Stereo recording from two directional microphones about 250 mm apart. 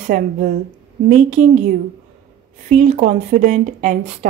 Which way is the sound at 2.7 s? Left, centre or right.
Right.